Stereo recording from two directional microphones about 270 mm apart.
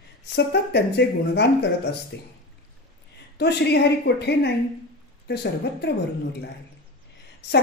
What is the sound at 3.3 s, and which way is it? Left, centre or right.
A woman's voice, left.